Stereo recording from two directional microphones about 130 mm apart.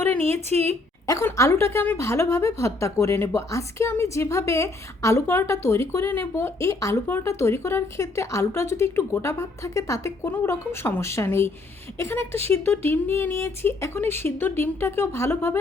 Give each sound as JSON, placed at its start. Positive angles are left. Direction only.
{"t": 0.0, "sound": "a sound", "side_deg": 15}
{"t": 0.3, "sound": "a woman's voice", "side_deg": -55}
{"t": 1.0, "sound": "speech", "side_deg": 25}